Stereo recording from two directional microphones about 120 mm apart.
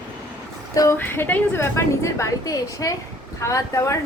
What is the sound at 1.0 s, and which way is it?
A woman's voice, 15° left (ahead or behind).